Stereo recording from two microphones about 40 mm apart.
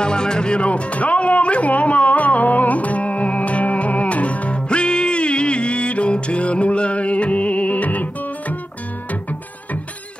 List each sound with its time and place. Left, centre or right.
0.0 s music: left